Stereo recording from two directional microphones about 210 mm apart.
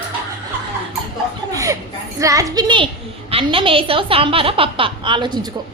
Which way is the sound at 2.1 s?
15° right (ahead or behind).